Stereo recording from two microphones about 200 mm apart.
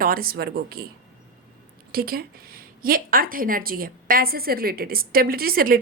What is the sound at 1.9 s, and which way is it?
A woman's voice, 50° right (ahead or behind).